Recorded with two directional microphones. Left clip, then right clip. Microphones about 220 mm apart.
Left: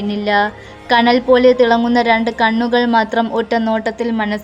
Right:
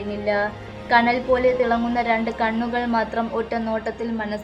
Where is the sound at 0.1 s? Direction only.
45° left (ahead or behind).